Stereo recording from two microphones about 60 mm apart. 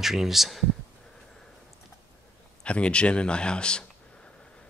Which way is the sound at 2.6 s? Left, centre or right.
Centre.